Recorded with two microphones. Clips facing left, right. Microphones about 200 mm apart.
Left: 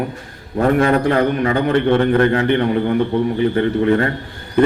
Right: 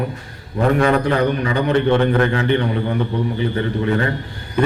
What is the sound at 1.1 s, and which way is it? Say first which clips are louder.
A man's voice: left 2 dB; 50° left (ahead or behind).